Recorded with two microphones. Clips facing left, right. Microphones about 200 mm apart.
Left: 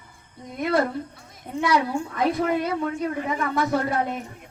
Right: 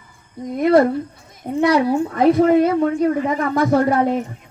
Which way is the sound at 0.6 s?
50° right (ahead or behind).